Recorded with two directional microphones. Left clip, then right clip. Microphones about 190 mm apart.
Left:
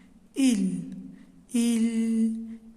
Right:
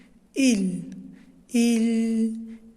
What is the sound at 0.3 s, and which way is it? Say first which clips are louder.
A woman's voice: right 3 dB; 25° right (ahead or behind).